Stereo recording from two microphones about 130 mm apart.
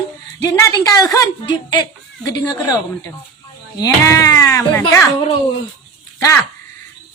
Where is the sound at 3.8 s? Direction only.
25° left (ahead or behind).